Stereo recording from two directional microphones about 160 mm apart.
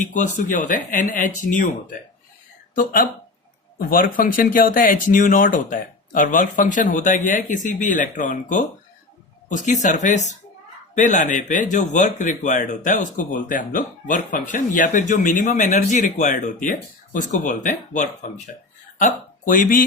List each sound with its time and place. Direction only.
0.0 s speech: 55° left (ahead or behind)
2.7 s speech: 60° left (ahead or behind)